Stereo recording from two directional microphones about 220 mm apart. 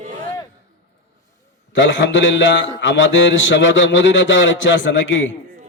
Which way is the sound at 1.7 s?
55° left (ahead or behind).